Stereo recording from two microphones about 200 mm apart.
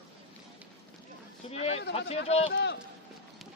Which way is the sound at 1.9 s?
30° left (ahead or behind).